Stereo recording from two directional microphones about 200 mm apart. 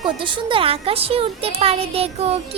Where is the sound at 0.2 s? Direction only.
25° right (ahead or behind).